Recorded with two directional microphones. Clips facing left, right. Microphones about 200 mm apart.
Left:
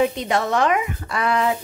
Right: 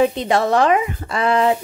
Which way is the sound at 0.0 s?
30° right (ahead or behind).